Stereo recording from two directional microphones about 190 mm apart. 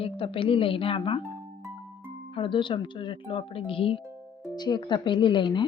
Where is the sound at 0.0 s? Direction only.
30° left (ahead or behind).